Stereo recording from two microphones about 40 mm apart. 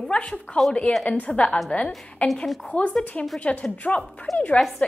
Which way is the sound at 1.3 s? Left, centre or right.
Centre.